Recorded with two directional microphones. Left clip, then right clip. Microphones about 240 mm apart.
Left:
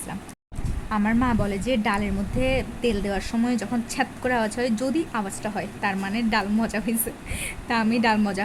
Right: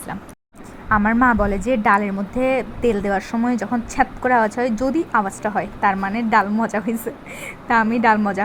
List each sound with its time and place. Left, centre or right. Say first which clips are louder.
0.9 s speech: right 8 dB; centre